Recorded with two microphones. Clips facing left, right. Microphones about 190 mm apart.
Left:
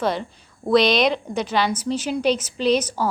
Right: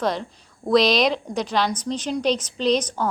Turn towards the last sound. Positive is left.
turn(degrees=5)  # may be behind; listen again after turning